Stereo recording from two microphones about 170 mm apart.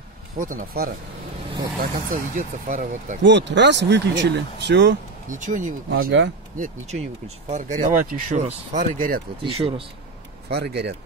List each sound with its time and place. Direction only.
0.4 s speech: 55° right (ahead or behind)
2.1 s speech: 50° right (ahead or behind)
3.2 s speech: 90° right
5.3 s speech: 50° right (ahead or behind)
5.9 s speech: 90° right
6.6 s speech: 40° right (ahead or behind)
9.4 s speech: 35° right (ahead or behind)
10.5 s speech: 75° right (ahead or behind)